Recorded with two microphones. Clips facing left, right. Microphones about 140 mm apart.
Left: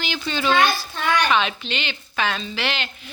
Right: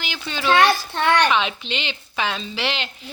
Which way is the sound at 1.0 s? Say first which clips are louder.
Right 3 dB; 70° right (ahead or behind).